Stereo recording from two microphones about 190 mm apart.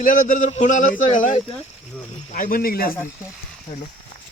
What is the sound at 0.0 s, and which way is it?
Speech, 45° left (ahead or behind).